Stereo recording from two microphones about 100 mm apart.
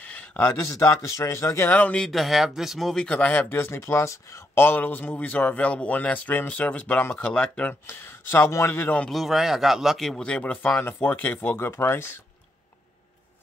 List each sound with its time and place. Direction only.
0.1 s a sound: 15° left (ahead or behind)
0.6 s speech: 30° left (ahead or behind)
1.7 s speech: 15° left (ahead or behind)
2.0 s speech: centre (ahead or behind)
3.1 s speech: 15° left (ahead or behind)
7.8 s speech: 20° left (ahead or behind)
9.1 s speech: centre (ahead or behind); by 12.1 s 25° left (ahead or behind)